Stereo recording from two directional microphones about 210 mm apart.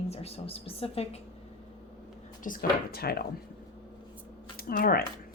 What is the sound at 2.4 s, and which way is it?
Speech, 40° left (ahead or behind).